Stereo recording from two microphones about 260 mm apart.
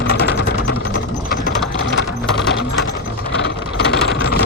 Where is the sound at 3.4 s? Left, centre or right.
Left.